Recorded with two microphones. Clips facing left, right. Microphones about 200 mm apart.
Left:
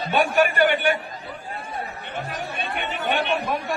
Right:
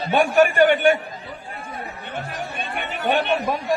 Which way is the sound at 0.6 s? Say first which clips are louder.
Right 5 dB; 45° right (ahead or behind).